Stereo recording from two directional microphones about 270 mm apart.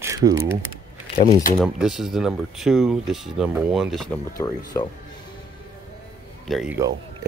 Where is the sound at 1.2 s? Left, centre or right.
Left.